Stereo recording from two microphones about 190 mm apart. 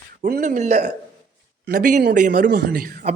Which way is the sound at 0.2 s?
45° right (ahead or behind).